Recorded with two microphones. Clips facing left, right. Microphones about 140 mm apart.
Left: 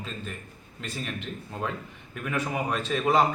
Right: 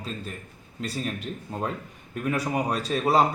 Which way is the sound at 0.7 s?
40° right (ahead or behind).